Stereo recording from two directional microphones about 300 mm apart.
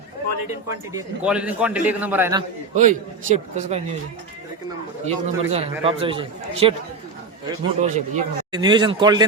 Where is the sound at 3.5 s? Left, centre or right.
Right.